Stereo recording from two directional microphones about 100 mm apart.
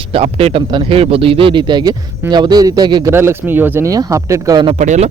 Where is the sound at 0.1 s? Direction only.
75° right (ahead or behind).